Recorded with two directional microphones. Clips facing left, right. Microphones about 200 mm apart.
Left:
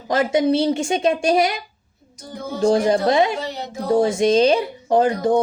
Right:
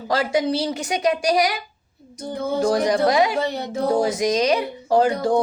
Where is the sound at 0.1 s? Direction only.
20° left (ahead or behind).